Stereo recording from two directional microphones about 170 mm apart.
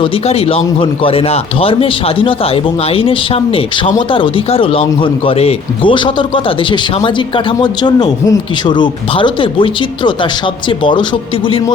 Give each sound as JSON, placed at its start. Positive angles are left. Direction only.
{"t": 0.0, "sound": "a man's voice", "side_deg": 35}